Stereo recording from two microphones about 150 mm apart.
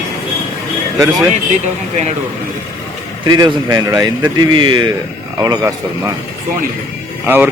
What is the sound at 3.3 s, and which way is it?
A man's voice, 25° right (ahead or behind).